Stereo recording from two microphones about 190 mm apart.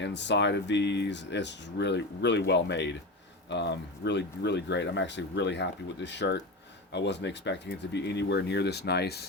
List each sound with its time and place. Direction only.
0.0 s speech: 65° left (ahead or behind)